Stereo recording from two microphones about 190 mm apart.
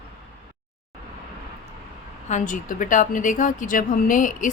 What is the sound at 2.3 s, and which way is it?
Speech, 45° left (ahead or behind).